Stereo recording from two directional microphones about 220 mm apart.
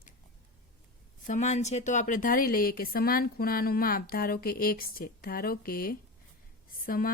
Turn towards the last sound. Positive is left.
turn(degrees=40)  # may be behind; listen again after turning